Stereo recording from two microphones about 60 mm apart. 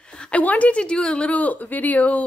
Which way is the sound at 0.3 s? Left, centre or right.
Left.